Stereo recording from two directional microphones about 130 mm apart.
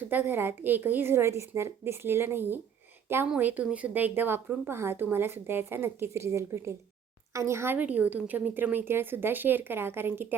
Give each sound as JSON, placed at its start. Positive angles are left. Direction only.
{"t": 0.0, "sound": "a woman's voice", "side_deg": -15}